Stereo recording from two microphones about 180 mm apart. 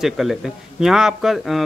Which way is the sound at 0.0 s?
Centre (ahead or behind).